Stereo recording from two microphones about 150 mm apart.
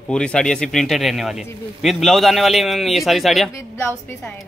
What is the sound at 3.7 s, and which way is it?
Speech, 15° left (ahead or behind).